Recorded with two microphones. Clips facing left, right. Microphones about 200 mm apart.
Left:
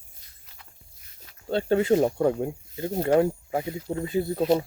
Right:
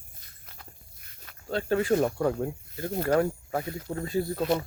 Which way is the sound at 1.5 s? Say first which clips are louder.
Left 4 dB; 25° left (ahead or behind).